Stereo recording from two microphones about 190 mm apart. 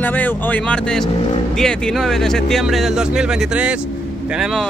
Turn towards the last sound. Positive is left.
turn(degrees=0)  # may be behind; listen again after turning